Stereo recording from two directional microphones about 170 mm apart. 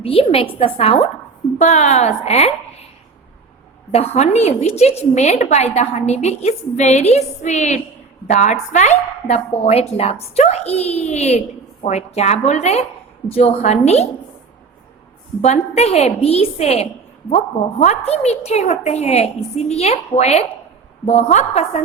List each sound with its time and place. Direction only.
0.0 s a woman's voice: 35° left (ahead or behind)
3.9 s a woman's voice: 40° left (ahead or behind)
15.4 s a woman's voice: 40° left (ahead or behind)